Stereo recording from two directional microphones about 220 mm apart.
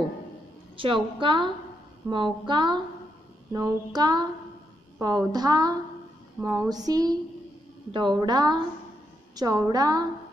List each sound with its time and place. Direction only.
0.7 s child singing: 25° right (ahead or behind)
5.0 s a woman's voice: 20° right (ahead or behind)
7.9 s child singing: 20° right (ahead or behind)
9.3 s a woman's voice: 15° right (ahead or behind)